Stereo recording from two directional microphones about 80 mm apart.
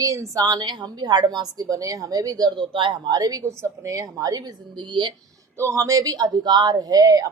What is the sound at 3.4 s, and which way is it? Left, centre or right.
Speech, right.